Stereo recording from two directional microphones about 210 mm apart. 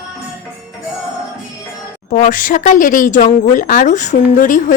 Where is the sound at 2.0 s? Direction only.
40° left (ahead or behind).